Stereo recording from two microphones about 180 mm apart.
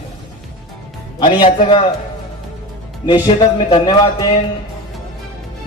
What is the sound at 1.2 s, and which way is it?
Speech, 25° left (ahead or behind).